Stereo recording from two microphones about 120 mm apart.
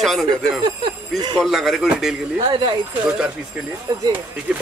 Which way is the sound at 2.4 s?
45° right (ahead or behind).